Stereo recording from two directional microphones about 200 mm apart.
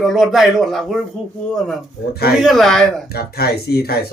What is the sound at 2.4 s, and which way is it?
Speech, centre (ahead or behind).